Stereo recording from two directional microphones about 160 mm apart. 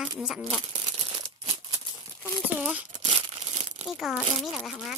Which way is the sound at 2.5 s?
5° right (ahead or behind).